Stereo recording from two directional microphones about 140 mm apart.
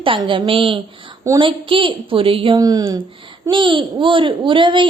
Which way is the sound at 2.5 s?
25° right (ahead or behind).